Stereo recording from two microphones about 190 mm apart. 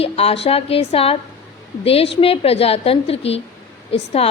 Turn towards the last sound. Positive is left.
turn(degrees=30)  # may be behind; listen again after turning